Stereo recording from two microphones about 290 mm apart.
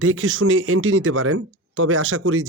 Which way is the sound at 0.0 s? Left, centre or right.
Right.